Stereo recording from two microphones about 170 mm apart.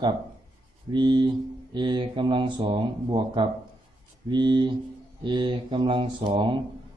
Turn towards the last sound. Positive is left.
turn(degrees=-30)  # may be behind; listen again after turning